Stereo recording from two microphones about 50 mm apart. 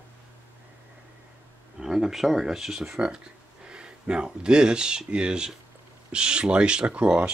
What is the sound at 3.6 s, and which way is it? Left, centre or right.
Speech, centre.